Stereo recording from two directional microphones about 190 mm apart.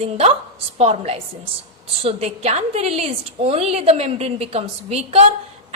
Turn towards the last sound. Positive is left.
turn(degrees=-35)  # may be behind; listen again after turning